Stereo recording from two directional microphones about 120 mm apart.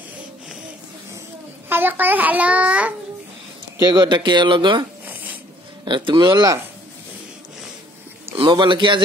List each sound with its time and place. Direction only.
1.7 s a child's voice: 15° right (ahead or behind)
3.9 s speech: 40° right (ahead or behind)
5.0 s a sound: 15° right (ahead or behind)
5.9 s speech: 40° right (ahead or behind)
8.4 s speech: 40° right (ahead or behind)